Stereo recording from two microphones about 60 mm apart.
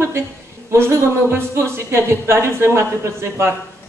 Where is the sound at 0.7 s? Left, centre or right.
Right.